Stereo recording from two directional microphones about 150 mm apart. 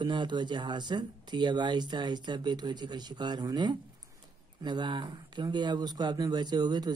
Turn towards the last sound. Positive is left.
turn(degrees=-30)  # may be behind; listen again after turning